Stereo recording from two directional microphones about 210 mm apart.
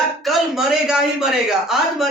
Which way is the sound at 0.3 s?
Centre (ahead or behind).